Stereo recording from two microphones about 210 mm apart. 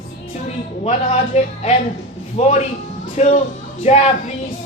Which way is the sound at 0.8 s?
30° left (ahead or behind).